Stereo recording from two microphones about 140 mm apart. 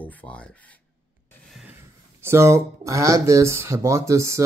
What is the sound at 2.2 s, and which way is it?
Speech, 20° right (ahead or behind).